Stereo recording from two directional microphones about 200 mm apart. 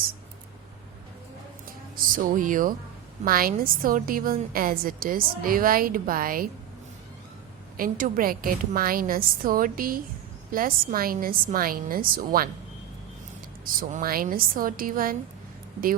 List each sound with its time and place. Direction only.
2.0 s a woman's voice: 40° right (ahead or behind)
7.8 s a woman's voice: 40° right (ahead or behind)
13.7 s a woman's voice: 45° right (ahead or behind)